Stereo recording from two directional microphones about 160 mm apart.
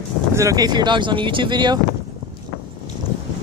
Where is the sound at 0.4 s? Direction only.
20° right (ahead or behind).